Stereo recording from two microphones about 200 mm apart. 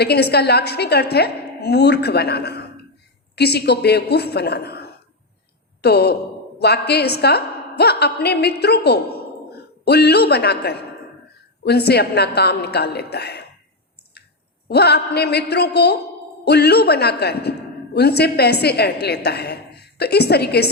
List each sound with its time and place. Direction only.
0.0 s a man's voice: 55° left (ahead or behind)
14.7 s a man's voice: 55° left (ahead or behind)